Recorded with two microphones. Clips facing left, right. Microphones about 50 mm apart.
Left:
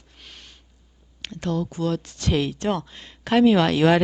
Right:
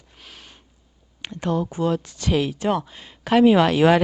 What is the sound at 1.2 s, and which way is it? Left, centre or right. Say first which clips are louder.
Speech: right 2 dB; centre.